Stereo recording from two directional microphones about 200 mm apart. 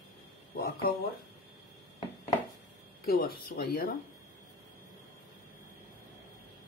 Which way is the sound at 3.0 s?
50° left (ahead or behind).